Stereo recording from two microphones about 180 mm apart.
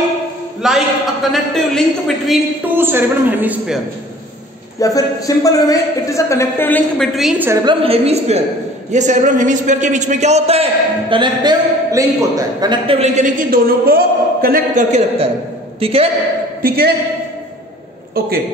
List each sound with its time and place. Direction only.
0.6 s a sound: centre (ahead or behind)
1.3 s speech: centre (ahead or behind)
2.8 s a man's voice: 10° right (ahead or behind)
4.7 s a man's voice: 20° left (ahead or behind)
7.2 s a man's voice: 5° right (ahead or behind)
7.6 s a man's voice: 30° right (ahead or behind)
16.6 s a woman's voice: 55° right (ahead or behind)